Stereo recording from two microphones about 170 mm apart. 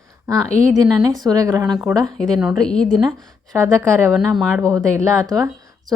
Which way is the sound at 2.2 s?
Centre (ahead or behind).